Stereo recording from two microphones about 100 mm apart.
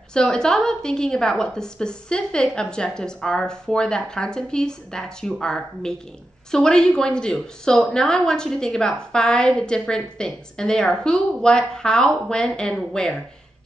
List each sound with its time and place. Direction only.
0.1 s a woman's voice: 5° left (ahead or behind)